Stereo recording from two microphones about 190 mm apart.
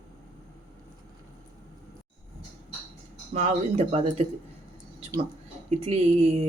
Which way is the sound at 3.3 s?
35° right (ahead or behind).